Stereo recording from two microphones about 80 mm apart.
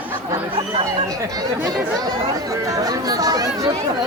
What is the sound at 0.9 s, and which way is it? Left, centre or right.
Speech, right.